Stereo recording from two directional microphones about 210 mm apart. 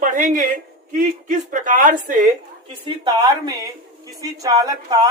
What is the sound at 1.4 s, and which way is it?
Speech, 40° right (ahead or behind).